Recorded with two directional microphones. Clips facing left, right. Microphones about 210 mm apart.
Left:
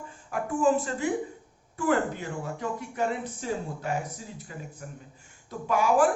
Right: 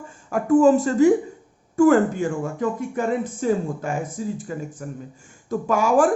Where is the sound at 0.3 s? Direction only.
45° right (ahead or behind).